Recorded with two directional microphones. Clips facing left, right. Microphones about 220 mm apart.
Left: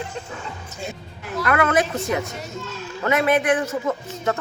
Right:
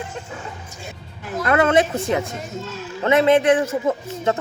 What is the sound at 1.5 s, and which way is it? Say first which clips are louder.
A man's voice: right 3 dB; 25° right (ahead or behind).